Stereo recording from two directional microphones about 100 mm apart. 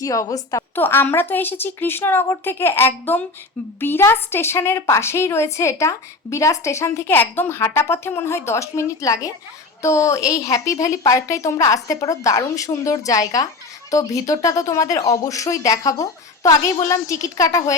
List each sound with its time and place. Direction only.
0.0 s speech: 35° left (ahead or behind)
0.8 s a woman's voice: 20° left (ahead or behind)